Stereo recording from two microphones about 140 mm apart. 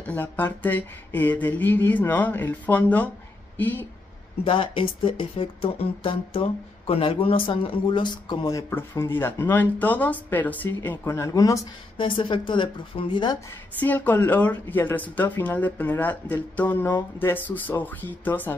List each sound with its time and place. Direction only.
0.0 s a woman's voice: 15° left (ahead or behind)
4.5 s speech: 40° left (ahead or behind); by 11.6 s 25° left (ahead or behind)
12.0 s a woman's voice: 35° left (ahead or behind)
13.5 s speech: 10° left (ahead or behind)